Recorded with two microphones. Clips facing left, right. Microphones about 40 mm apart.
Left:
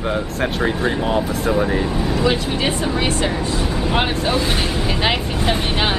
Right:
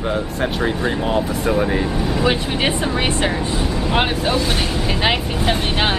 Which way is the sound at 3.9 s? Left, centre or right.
Centre.